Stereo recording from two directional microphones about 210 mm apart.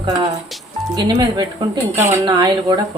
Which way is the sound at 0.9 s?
20° right (ahead or behind).